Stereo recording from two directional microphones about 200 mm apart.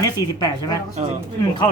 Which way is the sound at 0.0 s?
20° left (ahead or behind).